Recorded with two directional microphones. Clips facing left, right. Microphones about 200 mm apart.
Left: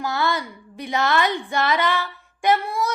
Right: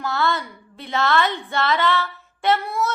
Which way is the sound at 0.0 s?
15° left (ahead or behind).